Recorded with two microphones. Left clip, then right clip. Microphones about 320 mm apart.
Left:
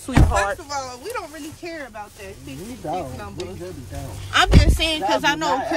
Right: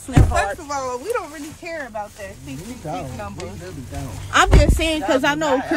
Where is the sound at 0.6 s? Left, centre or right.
Centre.